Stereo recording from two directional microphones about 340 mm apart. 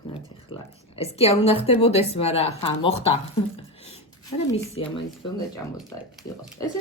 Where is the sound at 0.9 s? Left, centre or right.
Centre.